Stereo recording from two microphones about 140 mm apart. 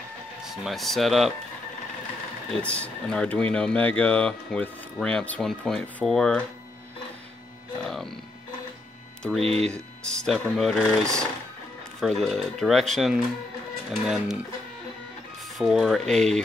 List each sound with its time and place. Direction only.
0.7 s speech: centre (ahead or behind)
2.6 s speech: 10° left (ahead or behind)
7.8 s music: centre (ahead or behind)
9.4 s speech: 45° right (ahead or behind)
10.0 s speech: 5° left (ahead or behind)
15.5 s speech: centre (ahead or behind)